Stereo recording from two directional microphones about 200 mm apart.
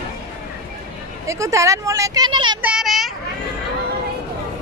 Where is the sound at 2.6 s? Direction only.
Centre (ahead or behind).